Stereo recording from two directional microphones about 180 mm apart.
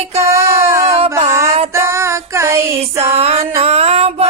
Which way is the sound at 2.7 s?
35° right (ahead or behind).